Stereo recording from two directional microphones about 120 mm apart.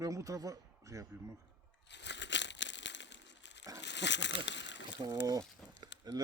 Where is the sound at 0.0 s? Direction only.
25° right (ahead or behind).